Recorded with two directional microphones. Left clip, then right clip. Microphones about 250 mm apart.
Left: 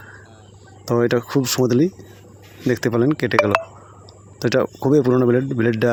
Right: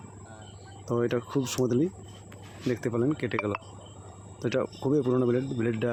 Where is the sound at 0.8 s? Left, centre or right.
Left.